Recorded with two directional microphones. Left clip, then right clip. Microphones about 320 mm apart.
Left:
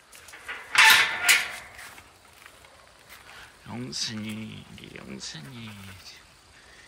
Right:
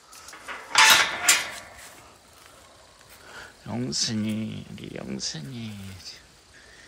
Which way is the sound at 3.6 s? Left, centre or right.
Centre.